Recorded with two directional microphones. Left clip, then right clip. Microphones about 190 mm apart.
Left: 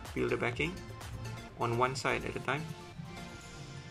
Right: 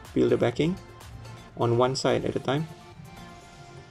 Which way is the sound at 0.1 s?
30° right (ahead or behind).